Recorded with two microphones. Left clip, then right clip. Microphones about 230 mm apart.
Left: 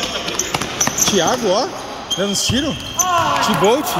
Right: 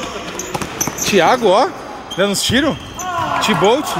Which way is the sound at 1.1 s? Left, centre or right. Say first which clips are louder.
Right 8 dB; right.